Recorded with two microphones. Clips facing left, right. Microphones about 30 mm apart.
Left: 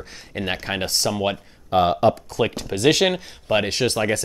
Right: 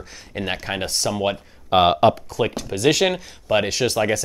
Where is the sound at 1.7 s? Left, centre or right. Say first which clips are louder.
Right 3 dB; right.